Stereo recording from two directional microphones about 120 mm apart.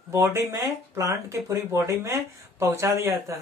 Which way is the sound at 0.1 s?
20° right (ahead or behind).